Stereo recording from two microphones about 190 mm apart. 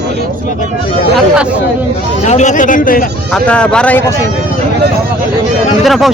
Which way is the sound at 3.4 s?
5° left (ahead or behind).